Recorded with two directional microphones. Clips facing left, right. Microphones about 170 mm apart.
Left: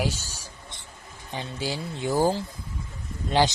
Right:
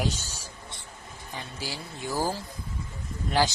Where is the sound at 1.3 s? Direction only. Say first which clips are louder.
Left 6 dB; 25° left (ahead or behind).